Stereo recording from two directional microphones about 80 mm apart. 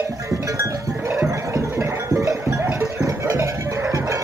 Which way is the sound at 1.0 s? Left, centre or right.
Right.